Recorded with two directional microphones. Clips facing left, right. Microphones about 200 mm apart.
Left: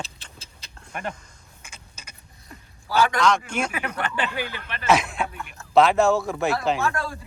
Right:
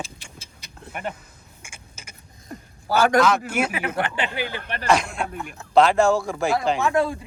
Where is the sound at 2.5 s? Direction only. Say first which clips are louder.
Right 5 dB; 45° right (ahead or behind).